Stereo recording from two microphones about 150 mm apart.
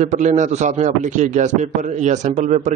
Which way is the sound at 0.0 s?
50° right (ahead or behind).